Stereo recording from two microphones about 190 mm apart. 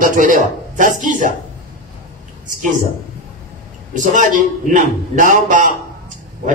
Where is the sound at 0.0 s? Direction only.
45° right (ahead or behind).